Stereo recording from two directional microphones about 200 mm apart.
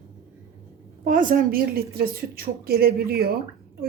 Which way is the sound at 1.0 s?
40° right (ahead or behind).